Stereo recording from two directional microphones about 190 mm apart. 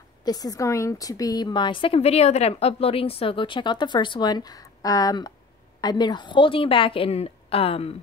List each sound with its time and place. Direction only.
0.2 s a woman's voice: 20° left (ahead or behind)